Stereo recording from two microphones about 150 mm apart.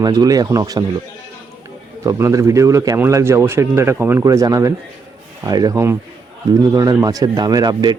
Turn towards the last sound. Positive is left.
turn(degrees=-25)  # may be behind; listen again after turning